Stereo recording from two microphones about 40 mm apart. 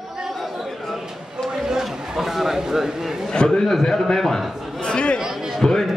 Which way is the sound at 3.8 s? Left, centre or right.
Centre.